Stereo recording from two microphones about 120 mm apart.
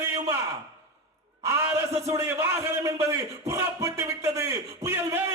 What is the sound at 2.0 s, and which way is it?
Speech, 25° right (ahead or behind).